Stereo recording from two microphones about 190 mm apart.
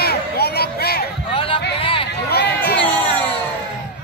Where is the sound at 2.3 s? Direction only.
60° left (ahead or behind).